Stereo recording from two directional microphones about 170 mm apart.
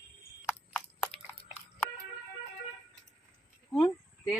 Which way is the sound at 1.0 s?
10° left (ahead or behind).